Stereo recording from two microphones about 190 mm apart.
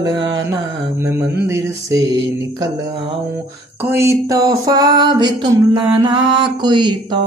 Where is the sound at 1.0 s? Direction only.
15° right (ahead or behind).